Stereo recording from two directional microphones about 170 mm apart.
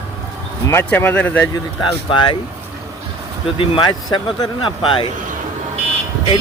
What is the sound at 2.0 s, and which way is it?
Speech, 30° left (ahead or behind).